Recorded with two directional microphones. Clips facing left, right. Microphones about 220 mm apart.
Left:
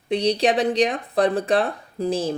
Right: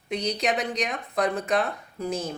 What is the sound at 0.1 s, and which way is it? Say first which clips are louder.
Speech: left 7 dB; 30° left (ahead or behind).